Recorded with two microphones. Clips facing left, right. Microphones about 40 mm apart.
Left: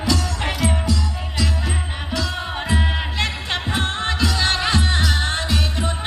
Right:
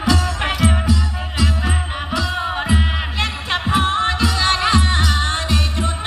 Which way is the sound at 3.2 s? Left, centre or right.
Centre.